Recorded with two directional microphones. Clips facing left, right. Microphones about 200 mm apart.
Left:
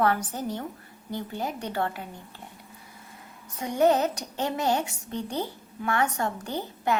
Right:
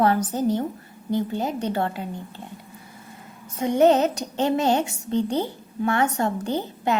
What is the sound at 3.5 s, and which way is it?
A woman's voice, 25° right (ahead or behind).